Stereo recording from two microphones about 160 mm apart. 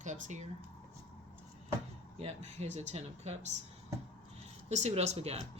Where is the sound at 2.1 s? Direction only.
45° right (ahead or behind).